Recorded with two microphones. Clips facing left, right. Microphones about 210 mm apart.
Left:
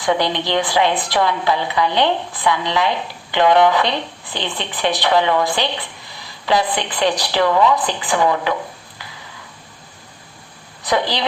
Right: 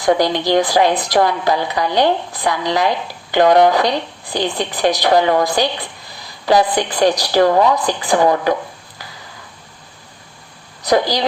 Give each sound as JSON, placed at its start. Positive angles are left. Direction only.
{"t": 0.0, "sound": "speech", "side_deg": -40}
{"t": 10.8, "sound": "a woman's voice", "side_deg": -40}